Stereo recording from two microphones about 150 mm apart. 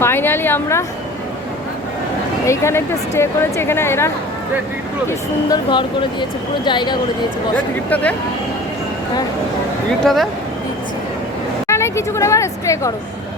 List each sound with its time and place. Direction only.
0.0 s speech: 15° left (ahead or behind)
2.5 s speech: 20° left (ahead or behind)
5.0 s speech: 30° left (ahead or behind)
7.5 s speech: 10° left (ahead or behind)
10.0 s speech: centre (ahead or behind)
11.7 s speech: 20° left (ahead or behind)